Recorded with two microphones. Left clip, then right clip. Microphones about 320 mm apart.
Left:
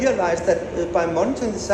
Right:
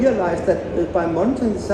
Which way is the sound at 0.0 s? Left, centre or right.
Centre.